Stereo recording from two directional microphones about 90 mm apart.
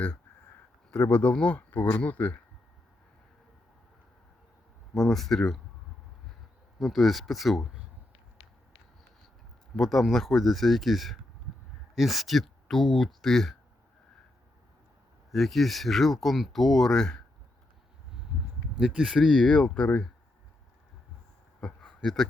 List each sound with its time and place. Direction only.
0.9 s speech: 25° left (ahead or behind)
1.2 s speech: 15° left (ahead or behind)
4.9 s speech: 5° left (ahead or behind)
6.7 s speech: centre (ahead or behind)
9.7 s speech: 5° left (ahead or behind)
15.3 s speech: centre (ahead or behind)
18.3 s a sound: 15° right (ahead or behind)
18.8 s speech: 5° right (ahead or behind)
19.5 s speech: 10° left (ahead or behind)
21.6 s a sound: 5° left (ahead or behind)